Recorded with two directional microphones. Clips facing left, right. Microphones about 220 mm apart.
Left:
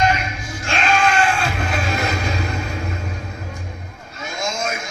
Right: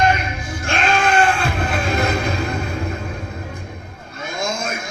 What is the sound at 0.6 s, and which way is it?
Bleat, 55° right (ahead or behind).